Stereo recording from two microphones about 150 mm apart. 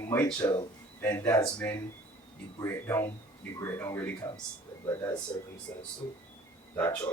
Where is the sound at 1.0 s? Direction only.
15° left (ahead or behind).